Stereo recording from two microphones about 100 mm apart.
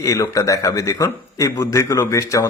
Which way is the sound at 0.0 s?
30° left (ahead or behind).